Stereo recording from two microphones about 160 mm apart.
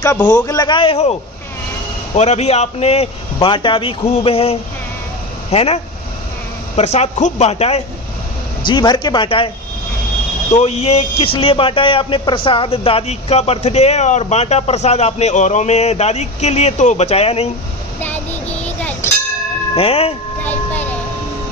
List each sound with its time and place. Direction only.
0.0 s a man's voice: 20° left (ahead or behind)
2.1 s a man's voice: 45° left (ahead or behind)
6.8 s speech: 45° left (ahead or behind)
8.6 s speech: 30° left (ahead or behind)
10.5 s a man's voice: 40° left (ahead or behind)
18.0 s child singing: 10° left (ahead or behind)
19.7 s a man's voice: 35° left (ahead or behind)